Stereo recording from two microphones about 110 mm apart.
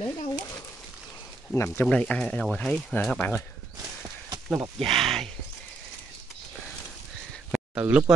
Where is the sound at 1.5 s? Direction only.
25° left (ahead or behind).